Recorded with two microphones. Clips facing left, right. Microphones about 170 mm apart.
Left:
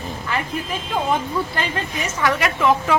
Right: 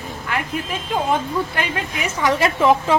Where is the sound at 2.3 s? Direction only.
30° right (ahead or behind).